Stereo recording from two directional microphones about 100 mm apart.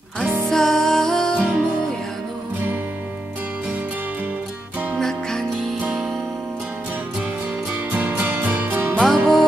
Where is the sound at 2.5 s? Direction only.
20° right (ahead or behind).